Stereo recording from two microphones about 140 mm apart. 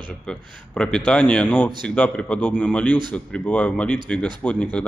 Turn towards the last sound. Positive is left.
turn(degrees=5)  # may be behind; listen again after turning